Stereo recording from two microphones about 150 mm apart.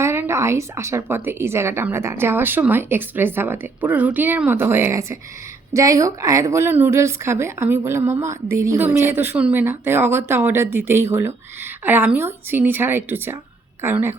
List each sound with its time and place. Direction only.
0.0 s a woman's voice: 15° right (ahead or behind)